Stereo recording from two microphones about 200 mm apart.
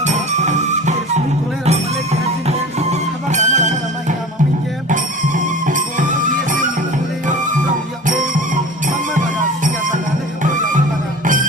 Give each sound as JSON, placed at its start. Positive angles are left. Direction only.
{"t": 0.0, "sound": "music", "side_deg": -35}
{"t": 2.5, "sound": "music", "side_deg": -35}
{"t": 4.9, "sound": "music", "side_deg": -40}
{"t": 8.0, "sound": "music", "side_deg": -40}
{"t": 9.6, "sound": "music", "side_deg": -40}